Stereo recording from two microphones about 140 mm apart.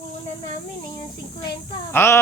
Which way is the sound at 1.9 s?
15° left (ahead or behind).